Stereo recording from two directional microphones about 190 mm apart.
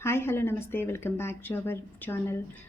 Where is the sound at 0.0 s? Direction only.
10° left (ahead or behind).